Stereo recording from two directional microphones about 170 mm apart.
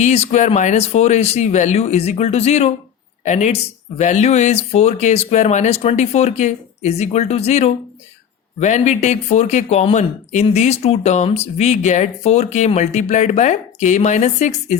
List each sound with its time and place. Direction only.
0.0 s speech: 40° left (ahead or behind)